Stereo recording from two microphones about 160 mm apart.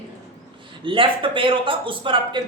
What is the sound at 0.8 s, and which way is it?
Speech, 30° right (ahead or behind).